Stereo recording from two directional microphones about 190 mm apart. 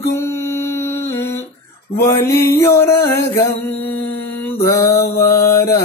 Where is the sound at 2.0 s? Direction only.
15° left (ahead or behind).